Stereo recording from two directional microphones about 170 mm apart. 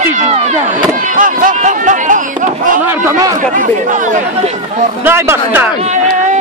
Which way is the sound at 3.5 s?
50° right (ahead or behind).